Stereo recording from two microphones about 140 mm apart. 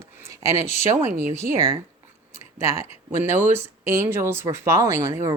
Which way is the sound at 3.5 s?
20° right (ahead or behind).